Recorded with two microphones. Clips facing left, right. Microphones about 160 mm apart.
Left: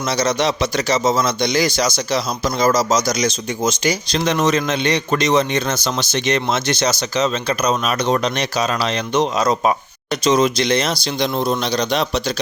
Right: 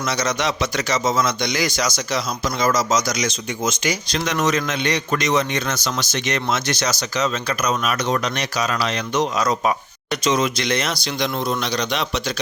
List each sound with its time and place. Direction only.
0.1 s a man's voice: 30° left (ahead or behind)